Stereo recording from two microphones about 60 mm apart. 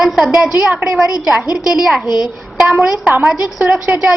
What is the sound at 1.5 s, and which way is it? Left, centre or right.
Speech, centre.